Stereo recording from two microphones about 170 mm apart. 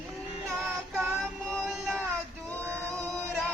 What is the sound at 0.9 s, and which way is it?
Child singing, centre (ahead or behind).